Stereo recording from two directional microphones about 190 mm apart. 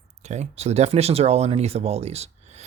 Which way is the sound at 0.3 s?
35° right (ahead or behind).